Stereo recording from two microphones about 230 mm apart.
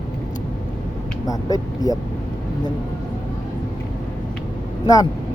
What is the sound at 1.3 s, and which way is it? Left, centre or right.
Speech, centre.